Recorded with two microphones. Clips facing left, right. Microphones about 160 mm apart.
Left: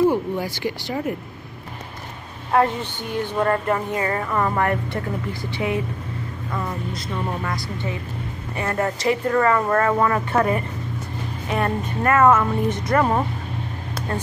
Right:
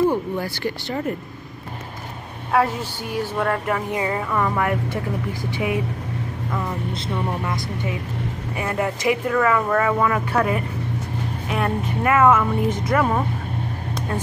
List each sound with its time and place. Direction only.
0.1 s speech: 15° left (ahead or behind)
2.5 s speech: centre (ahead or behind)
3.9 s a woman's voice: 10° right (ahead or behind)
4.3 s speech: 10° left (ahead or behind)
4.6 s a woman's voice: 10° right (ahead or behind)
7.2 s a woman's voice: 20° right (ahead or behind)